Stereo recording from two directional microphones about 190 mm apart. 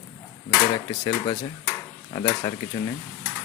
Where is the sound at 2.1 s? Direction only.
25° left (ahead or behind).